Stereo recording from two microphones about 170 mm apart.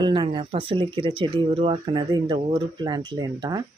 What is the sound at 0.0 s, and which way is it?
Speech, 30° right (ahead or behind).